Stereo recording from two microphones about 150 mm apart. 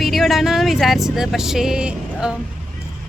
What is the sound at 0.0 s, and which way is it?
Vehicle, centre (ahead or behind).